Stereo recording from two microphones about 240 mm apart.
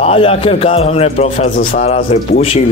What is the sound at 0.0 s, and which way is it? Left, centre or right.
Speech, left.